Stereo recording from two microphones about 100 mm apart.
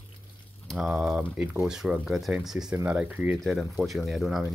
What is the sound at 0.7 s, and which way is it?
Speech, centre (ahead or behind).